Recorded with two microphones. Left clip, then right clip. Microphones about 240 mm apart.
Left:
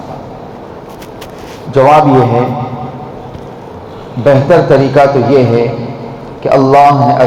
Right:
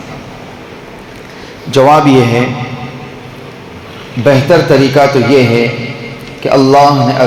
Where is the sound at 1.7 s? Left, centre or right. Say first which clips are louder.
Even; right.